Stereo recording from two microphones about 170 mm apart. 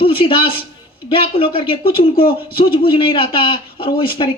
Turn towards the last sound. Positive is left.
turn(degrees=30)  # may be behind; listen again after turning